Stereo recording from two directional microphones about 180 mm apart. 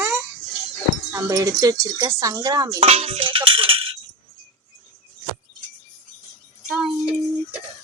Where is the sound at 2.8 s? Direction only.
30° right (ahead or behind).